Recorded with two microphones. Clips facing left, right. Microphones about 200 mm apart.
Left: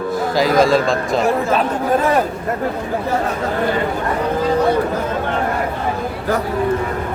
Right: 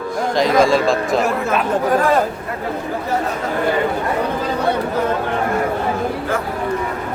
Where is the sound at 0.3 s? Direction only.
Centre (ahead or behind).